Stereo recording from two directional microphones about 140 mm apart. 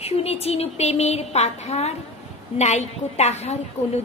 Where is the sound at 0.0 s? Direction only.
45° left (ahead or behind).